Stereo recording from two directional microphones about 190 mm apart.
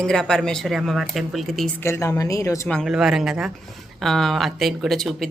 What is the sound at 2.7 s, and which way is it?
A woman's voice, centre (ahead or behind).